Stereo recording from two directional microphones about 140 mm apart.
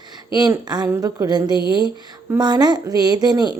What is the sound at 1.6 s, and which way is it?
Speech, 35° left (ahead or behind).